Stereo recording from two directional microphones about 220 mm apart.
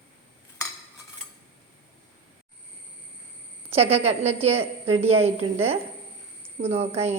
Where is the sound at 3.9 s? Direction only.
30° right (ahead or behind).